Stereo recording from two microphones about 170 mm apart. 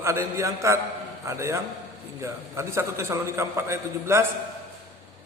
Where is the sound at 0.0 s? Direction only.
15° right (ahead or behind).